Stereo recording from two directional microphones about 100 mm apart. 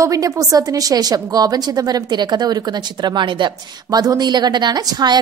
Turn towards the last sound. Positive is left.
turn(degrees=-40)  # may be behind; listen again after turning